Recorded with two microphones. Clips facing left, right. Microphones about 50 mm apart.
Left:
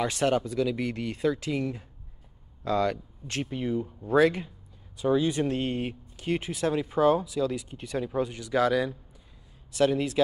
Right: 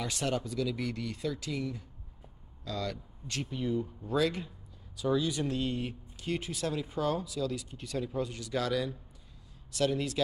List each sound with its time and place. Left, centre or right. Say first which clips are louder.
0.0 s speech: left 8 dB; left
3.5 s speech: left 1 dB; left